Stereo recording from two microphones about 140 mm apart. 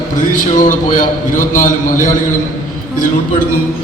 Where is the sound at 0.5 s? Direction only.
65° left (ahead or behind).